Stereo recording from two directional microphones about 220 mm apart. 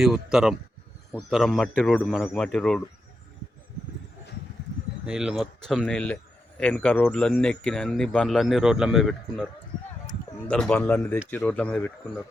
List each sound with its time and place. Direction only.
0.0 s speech: centre (ahead or behind)
5.0 s speech: 5° right (ahead or behind)
10.5 s speech: 5° left (ahead or behind)